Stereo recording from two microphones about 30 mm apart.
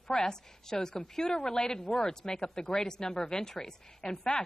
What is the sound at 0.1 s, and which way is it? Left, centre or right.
A woman's voice, centre.